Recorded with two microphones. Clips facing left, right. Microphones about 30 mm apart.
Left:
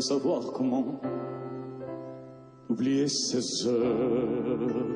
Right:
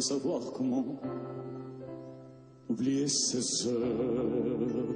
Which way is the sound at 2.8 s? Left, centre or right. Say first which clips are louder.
Left 3 dB; left.